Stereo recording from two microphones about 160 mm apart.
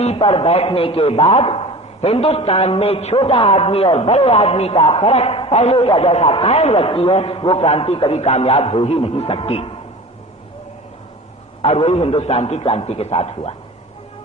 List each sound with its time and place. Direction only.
0.0 s a man's voice: 40° left (ahead or behind)
11.6 s a man's voice: 40° left (ahead or behind)